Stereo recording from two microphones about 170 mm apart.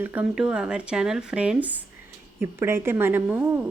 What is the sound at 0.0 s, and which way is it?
A woman's voice, 10° right (ahead or behind).